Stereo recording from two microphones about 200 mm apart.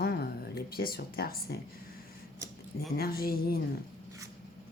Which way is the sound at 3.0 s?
50° left (ahead or behind).